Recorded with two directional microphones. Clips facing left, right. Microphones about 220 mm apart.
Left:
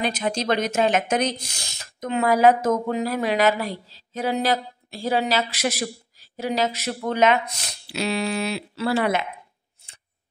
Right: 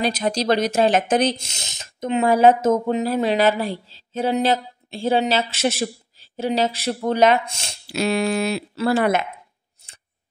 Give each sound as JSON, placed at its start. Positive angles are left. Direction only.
{"t": 0.0, "sound": "speech", "side_deg": -35}
{"t": 7.9, "sound": "speech", "side_deg": -50}